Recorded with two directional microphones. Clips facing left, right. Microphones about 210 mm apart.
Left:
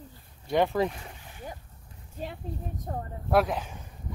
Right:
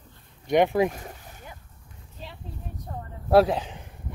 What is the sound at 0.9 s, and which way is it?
Boat, 45° right (ahead or behind).